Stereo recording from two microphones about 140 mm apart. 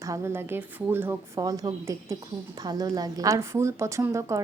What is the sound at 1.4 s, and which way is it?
A woman's voice, 25° right (ahead or behind).